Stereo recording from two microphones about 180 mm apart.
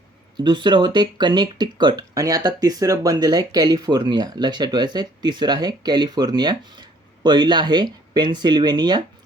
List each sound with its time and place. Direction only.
0.3 s speech: 25° right (ahead or behind)